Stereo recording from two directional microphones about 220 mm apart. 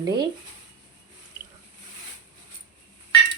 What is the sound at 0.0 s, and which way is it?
Speech, 20° right (ahead or behind).